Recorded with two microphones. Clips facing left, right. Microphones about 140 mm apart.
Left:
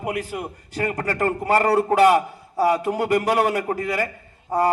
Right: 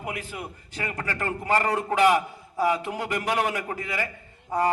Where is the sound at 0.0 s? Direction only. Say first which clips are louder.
Left 7 dB; 40° left (ahead or behind).